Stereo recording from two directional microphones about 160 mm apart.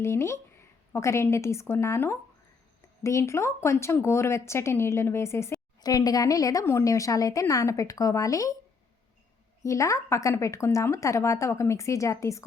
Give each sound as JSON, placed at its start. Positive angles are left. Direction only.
{"t": 0.0, "sound": "speech", "side_deg": 15}
{"t": 9.6, "sound": "speech", "side_deg": 20}